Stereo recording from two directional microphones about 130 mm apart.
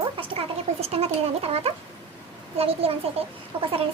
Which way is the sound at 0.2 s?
50° right (ahead or behind).